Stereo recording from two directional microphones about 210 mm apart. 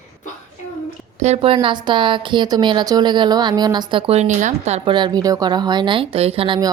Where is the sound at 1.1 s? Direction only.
30° right (ahead or behind).